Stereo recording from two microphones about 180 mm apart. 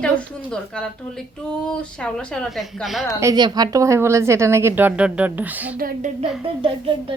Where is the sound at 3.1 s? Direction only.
20° right (ahead or behind).